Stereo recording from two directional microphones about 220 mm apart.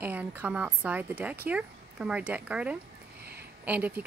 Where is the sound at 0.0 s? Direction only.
10° right (ahead or behind).